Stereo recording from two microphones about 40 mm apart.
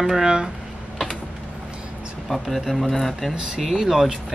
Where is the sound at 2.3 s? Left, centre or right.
Centre.